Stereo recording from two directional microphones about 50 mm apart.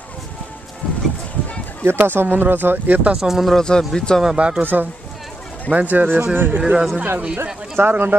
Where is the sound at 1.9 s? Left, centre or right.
Right.